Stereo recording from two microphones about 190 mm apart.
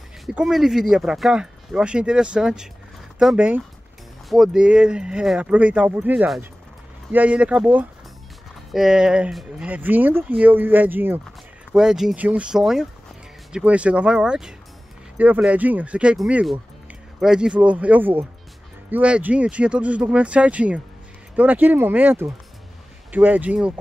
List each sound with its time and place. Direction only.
0.3 s speech: 5° right (ahead or behind)